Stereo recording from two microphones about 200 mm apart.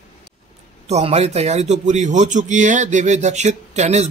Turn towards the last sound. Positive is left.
turn(degrees=-35)  # may be behind; listen again after turning